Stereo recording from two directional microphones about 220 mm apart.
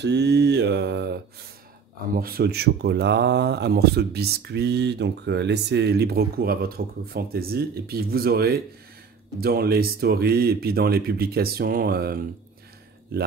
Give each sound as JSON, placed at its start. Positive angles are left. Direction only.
{"t": 0.0, "sound": "speech", "side_deg": -50}